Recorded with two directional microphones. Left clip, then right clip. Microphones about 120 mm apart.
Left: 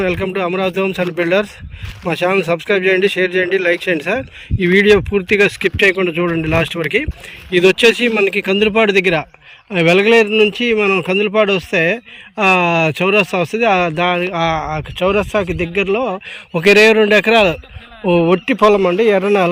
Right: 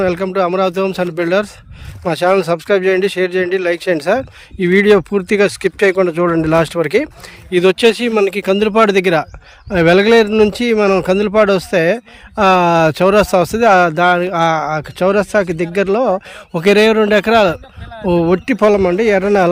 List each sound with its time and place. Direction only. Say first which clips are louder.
0.0 s speech: right 3 dB; 25° right (ahead or behind)